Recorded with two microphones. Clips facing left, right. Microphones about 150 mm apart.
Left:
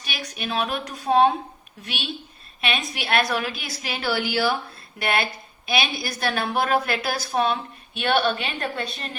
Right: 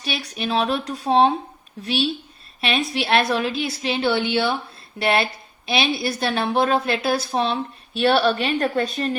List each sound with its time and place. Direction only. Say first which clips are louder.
0.3 s a woman's voice: right 4 dB; 30° right (ahead or behind)